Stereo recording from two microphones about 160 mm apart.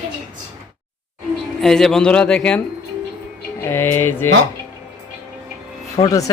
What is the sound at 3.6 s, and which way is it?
Music, 15° left (ahead or behind).